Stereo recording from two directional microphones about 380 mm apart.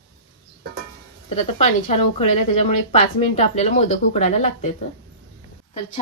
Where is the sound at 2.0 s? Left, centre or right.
Left.